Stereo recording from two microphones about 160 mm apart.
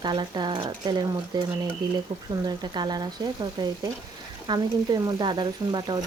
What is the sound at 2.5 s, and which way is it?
Speech, 25° right (ahead or behind).